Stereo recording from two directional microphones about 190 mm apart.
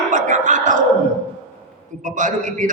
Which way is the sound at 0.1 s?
40° right (ahead or behind).